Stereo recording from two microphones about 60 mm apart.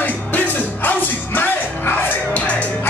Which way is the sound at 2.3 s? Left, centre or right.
Left.